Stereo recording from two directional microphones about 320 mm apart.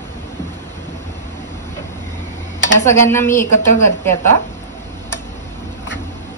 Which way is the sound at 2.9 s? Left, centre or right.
Centre.